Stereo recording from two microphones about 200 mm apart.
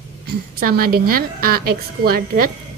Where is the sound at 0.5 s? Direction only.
50° right (ahead or behind).